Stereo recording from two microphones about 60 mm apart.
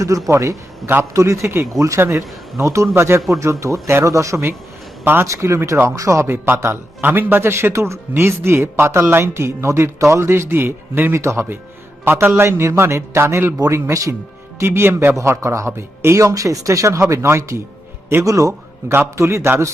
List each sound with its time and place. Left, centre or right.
0.3 s speech: right
1.7 s speech: right
2.0 s speech: right
6.0 s speech: right
11.2 s speech: right
12.0 s a man's voice: right
12.4 s speech: right
14.6 s speech: right
15.1 s speech: right
17.2 s speech: right
18.2 s speech: right